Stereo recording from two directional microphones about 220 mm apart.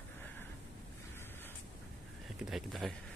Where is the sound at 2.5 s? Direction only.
Centre (ahead or behind).